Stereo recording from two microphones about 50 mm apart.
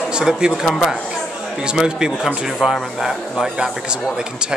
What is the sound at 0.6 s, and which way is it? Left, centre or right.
Speech, centre.